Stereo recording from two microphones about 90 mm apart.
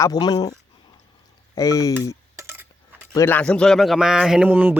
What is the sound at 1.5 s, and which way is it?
Speech, 40° left (ahead or behind).